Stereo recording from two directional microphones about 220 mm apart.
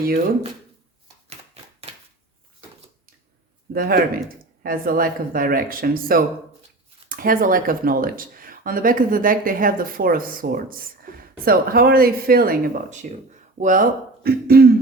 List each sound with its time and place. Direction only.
3.8 s speech: 40° right (ahead or behind)
14.3 s throat clearing: 45° right (ahead or behind)